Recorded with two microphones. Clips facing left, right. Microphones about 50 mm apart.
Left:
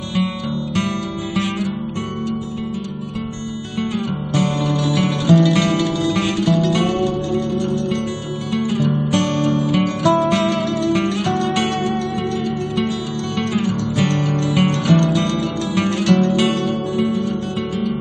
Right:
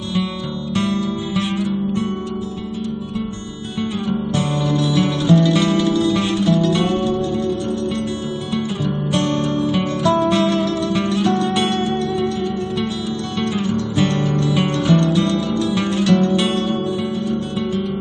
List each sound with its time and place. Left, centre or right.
4.9 s music: left
9.1 s music: left
13.4 s music: left